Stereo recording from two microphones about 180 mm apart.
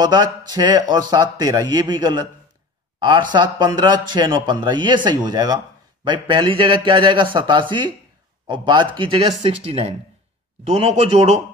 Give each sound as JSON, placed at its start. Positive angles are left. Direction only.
{"t": 0.0, "sound": "a man's voice", "side_deg": -25}